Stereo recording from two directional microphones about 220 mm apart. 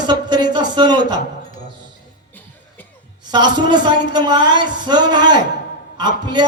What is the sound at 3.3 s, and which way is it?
Music, 20° right (ahead or behind).